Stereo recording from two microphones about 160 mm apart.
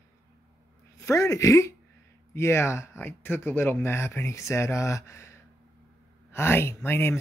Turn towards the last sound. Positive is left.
turn(degrees=15)  # may be behind; listen again after turning